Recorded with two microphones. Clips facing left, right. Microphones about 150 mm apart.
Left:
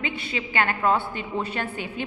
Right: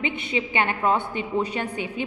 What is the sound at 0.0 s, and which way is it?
A woman's voice, 20° right (ahead or behind).